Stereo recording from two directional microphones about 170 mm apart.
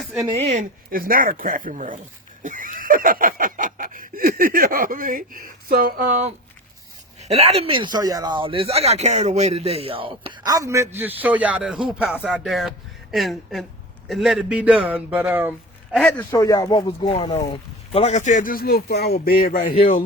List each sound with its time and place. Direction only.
0.3 s speech: 40° right (ahead or behind)
0.9 s a man's voice: 55° right (ahead or behind); by 15.5 s 10° right (ahead or behind)
15.9 s a man's voice: 5° left (ahead or behind)
16.3 s speech: 20° left (ahead or behind); by 20.1 s 50° left (ahead or behind)